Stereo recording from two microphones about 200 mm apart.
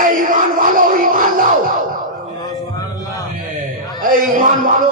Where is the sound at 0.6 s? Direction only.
45° right (ahead or behind).